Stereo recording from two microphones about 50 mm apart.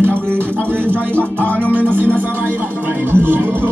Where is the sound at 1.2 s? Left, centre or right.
Left.